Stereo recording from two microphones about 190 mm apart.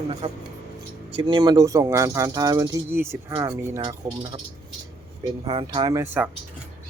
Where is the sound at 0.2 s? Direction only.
25° right (ahead or behind).